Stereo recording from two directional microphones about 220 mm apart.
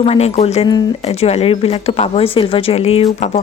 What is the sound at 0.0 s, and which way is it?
Speech, 30° left (ahead or behind).